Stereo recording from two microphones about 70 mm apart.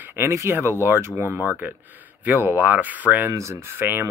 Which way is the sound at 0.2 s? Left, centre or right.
Right.